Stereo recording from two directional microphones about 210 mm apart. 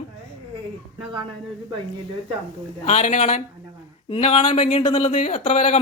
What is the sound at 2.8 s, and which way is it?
Speech, 35° left (ahead or behind).